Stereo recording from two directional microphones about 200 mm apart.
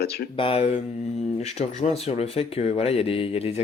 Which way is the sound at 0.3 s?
25° left (ahead or behind).